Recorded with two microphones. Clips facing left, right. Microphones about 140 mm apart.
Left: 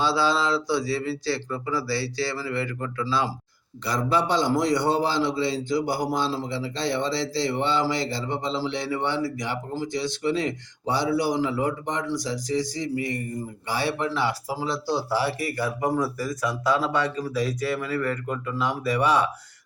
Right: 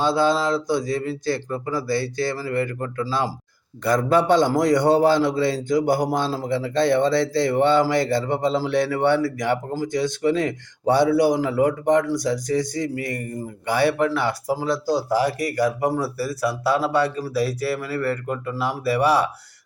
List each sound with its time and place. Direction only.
0.0 s a man's voice: 50° right (ahead or behind)